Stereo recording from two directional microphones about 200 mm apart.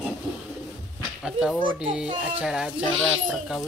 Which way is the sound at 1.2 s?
5° right (ahead or behind).